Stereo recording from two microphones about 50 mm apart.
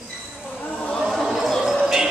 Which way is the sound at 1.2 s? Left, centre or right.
Centre.